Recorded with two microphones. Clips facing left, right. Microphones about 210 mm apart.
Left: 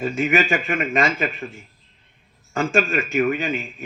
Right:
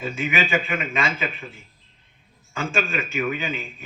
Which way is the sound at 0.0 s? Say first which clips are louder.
Left 5 dB; 45° left (ahead or behind).